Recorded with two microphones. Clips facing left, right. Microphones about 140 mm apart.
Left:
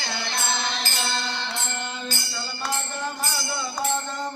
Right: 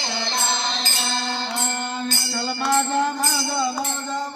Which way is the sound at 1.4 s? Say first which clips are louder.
Right 5 dB; 45° right (ahead or behind).